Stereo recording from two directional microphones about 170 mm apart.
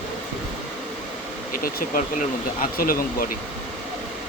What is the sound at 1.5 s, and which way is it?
Speech, 55° left (ahead or behind).